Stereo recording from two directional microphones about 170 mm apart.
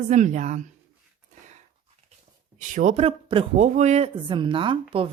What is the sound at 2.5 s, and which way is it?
Speech, 50° right (ahead or behind).